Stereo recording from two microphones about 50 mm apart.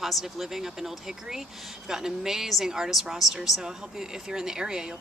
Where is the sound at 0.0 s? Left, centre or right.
Centre.